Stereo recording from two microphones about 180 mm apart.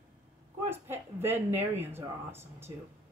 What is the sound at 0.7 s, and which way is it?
Speech, 15° right (ahead or behind).